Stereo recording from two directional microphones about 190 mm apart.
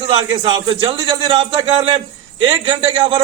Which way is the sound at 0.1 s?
20° right (ahead or behind).